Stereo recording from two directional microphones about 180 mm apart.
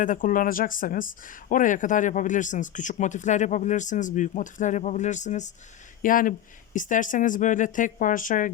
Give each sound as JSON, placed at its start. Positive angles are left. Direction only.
{"t": 0.0, "sound": "speech", "side_deg": 45}